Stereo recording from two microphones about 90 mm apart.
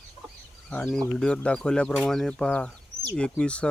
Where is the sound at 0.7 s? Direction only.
10° left (ahead or behind).